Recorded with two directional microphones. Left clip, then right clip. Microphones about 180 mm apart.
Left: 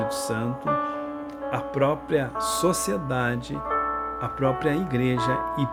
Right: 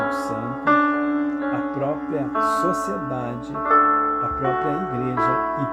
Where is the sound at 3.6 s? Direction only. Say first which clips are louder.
Right 10 dB; 35° right (ahead or behind).